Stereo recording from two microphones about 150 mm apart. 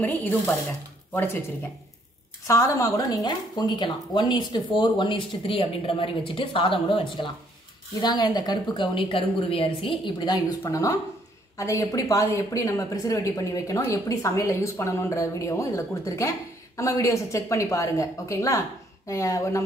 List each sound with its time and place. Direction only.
0.0 s speech: 10° left (ahead or behind)
2.4 s speech: 20° left (ahead or behind)
10.6 s speech: 20° left (ahead or behind)